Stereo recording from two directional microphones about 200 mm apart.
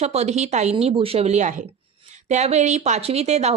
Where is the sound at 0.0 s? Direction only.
30° right (ahead or behind).